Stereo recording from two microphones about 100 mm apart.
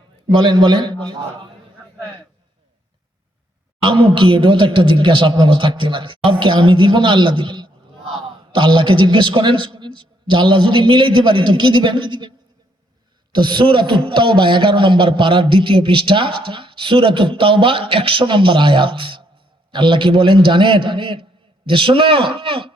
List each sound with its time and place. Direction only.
0.3 s a man's voice: 55° right (ahead or behind)
3.8 s a man's voice: 55° right (ahead or behind)
13.3 s a man's voice: 50° right (ahead or behind)